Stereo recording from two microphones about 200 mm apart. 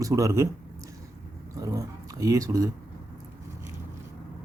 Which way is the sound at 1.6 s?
15° right (ahead or behind).